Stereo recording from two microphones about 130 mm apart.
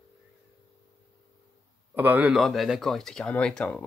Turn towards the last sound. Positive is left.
turn(degrees=5)  # may be behind; listen again after turning